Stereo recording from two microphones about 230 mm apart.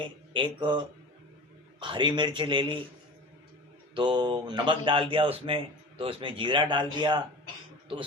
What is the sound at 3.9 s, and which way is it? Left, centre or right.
Speech, centre.